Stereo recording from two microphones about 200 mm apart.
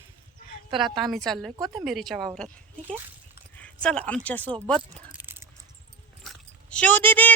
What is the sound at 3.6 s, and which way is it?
Speech, 5° left (ahead or behind).